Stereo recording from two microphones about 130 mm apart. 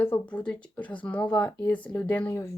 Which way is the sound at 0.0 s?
15° left (ahead or behind).